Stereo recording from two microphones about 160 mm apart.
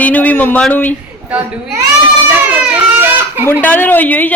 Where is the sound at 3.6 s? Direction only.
10° left (ahead or behind).